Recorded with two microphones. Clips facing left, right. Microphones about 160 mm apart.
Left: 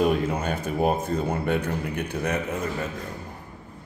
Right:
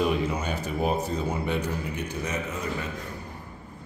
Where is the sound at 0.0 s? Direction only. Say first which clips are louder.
Left 3 dB; 50° left (ahead or behind).